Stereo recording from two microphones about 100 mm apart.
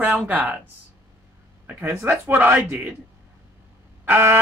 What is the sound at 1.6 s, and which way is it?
A man's voice, 25° right (ahead or behind).